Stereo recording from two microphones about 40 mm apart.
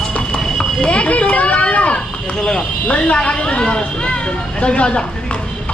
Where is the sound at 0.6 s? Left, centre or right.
Left.